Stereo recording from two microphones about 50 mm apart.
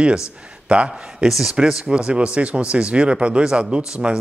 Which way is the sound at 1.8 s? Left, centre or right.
Right.